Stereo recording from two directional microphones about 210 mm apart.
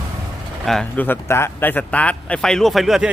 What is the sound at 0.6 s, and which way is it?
Speech, 5° left (ahead or behind).